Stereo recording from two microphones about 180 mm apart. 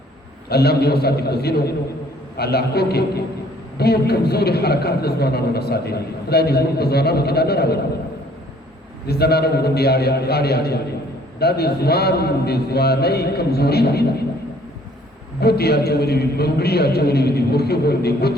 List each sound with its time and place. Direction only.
0.4 s a man's voice: 60° left (ahead or behind)
9.0 s a man's voice: 60° left (ahead or behind)
15.4 s a man's voice: 60° left (ahead or behind)